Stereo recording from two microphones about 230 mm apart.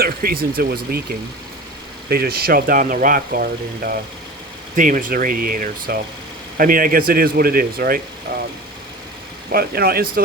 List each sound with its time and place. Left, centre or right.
0.0 s speech: right
2.0 s speech: right
9.5 s speech: right